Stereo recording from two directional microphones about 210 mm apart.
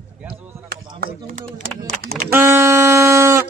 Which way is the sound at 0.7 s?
45° right (ahead or behind).